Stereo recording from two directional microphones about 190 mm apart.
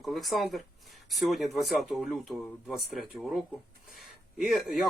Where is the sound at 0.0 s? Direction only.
Centre (ahead or behind).